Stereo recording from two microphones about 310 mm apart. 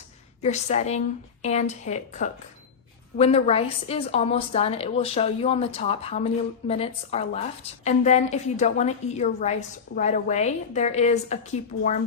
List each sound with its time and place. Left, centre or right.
0.4 s a woman's voice: left